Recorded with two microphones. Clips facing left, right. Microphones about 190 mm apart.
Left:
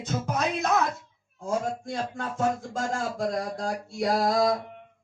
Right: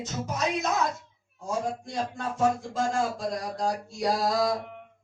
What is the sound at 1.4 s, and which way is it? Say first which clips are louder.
A man's voice: left 2 dB; 50° left (ahead or behind).